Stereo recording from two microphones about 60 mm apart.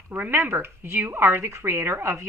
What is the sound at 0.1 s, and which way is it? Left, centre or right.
Speech, right.